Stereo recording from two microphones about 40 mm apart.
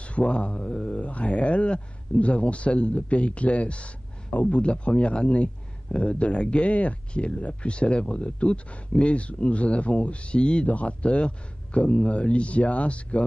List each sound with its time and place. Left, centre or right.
0.0 s a man's voice: left